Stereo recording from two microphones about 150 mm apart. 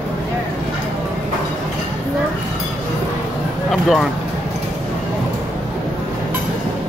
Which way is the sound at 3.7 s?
5° left (ahead or behind).